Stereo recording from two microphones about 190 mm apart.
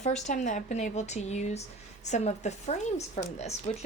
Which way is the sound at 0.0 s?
40° left (ahead or behind).